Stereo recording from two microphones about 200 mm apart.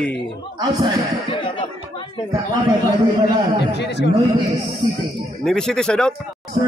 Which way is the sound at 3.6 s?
60° left (ahead or behind).